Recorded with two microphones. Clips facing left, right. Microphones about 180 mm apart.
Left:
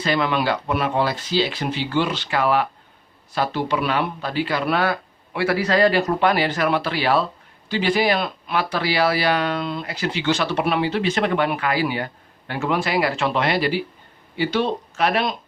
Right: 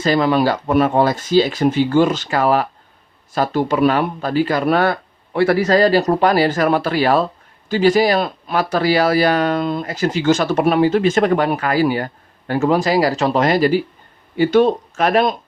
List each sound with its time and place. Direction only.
0.0 s speech: 40° right (ahead or behind)